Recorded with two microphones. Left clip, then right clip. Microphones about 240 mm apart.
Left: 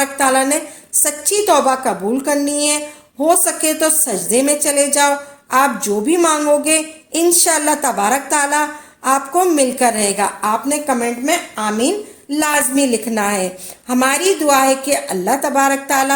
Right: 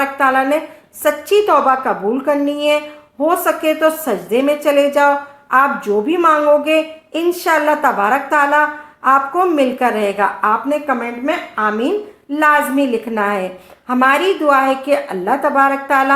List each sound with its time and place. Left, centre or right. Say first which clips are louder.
0.2 s a woman's voice: right 1 dB; left